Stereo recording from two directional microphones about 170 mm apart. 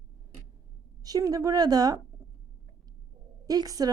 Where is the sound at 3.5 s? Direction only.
20° right (ahead or behind).